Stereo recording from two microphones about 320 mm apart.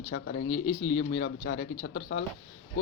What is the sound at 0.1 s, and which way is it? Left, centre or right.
Speech, left.